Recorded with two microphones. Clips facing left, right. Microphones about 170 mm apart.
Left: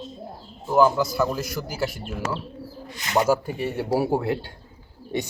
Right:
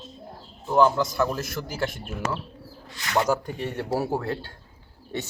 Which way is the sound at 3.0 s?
20° left (ahead or behind).